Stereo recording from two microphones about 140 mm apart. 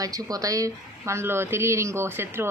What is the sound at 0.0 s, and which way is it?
Speech, 25° right (ahead or behind).